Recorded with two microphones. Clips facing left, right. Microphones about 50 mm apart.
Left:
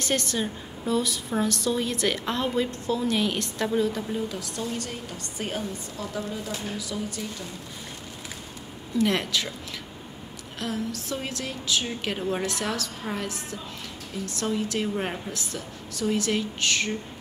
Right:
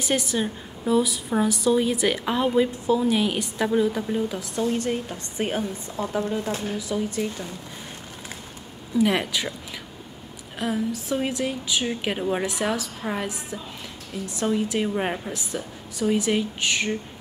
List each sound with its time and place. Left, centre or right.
0.0 s a woman's voice: centre; by 7.4 s right
8.9 s a woman's voice: centre
10.6 s a woman's voice: centre